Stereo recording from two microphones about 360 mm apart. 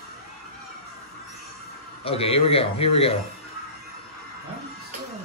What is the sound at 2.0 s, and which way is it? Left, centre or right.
A man's voice, centre.